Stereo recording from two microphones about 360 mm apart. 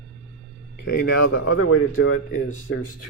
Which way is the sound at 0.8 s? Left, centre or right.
Left.